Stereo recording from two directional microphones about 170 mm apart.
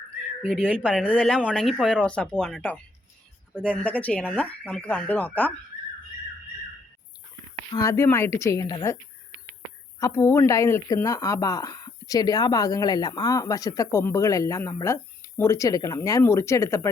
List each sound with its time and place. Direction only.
0.4 s speech: 5° left (ahead or behind)
7.7 s speech: 20° left (ahead or behind)
10.0 s speech: 15° left (ahead or behind)